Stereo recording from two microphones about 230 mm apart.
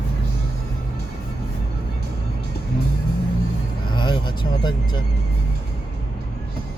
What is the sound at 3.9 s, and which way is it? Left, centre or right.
Vehicle, centre.